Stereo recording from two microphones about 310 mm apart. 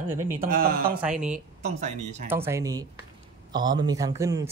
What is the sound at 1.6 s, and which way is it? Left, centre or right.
Speech, right.